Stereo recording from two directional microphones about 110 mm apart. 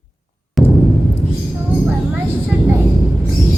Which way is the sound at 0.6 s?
Centre (ahead or behind).